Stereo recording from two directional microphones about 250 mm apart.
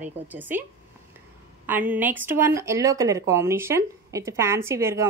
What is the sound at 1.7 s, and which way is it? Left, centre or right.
A woman's voice, centre.